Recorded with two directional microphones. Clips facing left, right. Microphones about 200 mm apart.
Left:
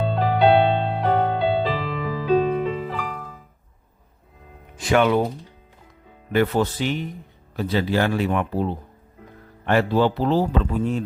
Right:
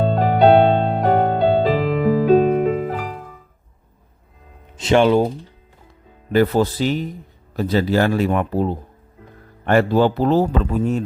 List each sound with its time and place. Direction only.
0.0 s music: 45° right (ahead or behind)
4.8 s speech: 25° right (ahead or behind)
6.3 s speech: 35° right (ahead or behind)